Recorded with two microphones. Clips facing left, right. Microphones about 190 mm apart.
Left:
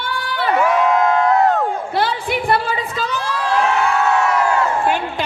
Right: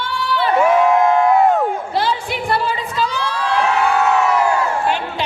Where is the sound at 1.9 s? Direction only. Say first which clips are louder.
Left 1 dB; 55° left (ahead or behind).